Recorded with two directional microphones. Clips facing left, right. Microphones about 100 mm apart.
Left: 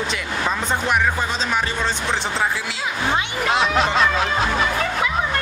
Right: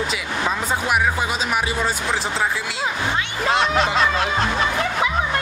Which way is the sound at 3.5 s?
Centre (ahead or behind).